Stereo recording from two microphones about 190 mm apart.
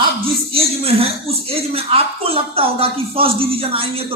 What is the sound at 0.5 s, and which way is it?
Speech, 30° right (ahead or behind).